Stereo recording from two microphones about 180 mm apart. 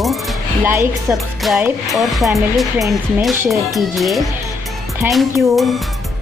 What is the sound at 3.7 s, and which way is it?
Music, centre (ahead or behind).